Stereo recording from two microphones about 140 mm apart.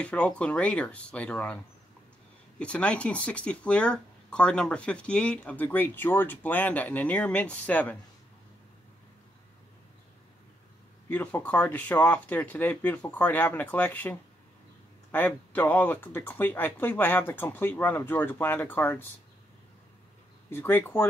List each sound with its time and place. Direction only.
0.0 s speech: 10° left (ahead or behind)
2.6 s speech: 10° left (ahead or behind)
11.1 s speech: 10° left (ahead or behind)
20.4 s speech: 15° left (ahead or behind)